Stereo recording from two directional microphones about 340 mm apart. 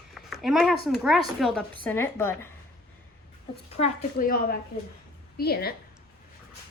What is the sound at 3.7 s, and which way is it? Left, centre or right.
A woman's voice, left.